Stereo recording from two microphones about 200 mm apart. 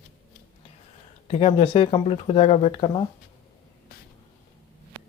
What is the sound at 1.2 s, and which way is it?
Speech, 30° left (ahead or behind).